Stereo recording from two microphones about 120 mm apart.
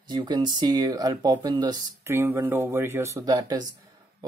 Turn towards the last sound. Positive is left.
turn(degrees=-30)  # may be behind; listen again after turning